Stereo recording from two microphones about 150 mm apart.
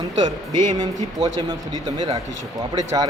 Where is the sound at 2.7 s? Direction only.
25° right (ahead or behind).